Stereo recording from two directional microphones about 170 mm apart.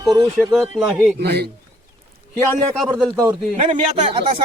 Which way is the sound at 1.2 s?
75° right (ahead or behind).